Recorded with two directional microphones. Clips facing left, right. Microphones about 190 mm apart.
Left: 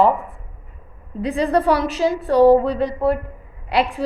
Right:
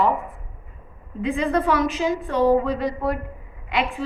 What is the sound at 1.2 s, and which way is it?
A woman's voice, 35° left (ahead or behind).